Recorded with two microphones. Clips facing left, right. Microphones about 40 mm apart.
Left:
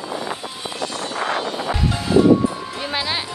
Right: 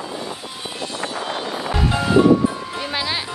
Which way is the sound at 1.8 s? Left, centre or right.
Right.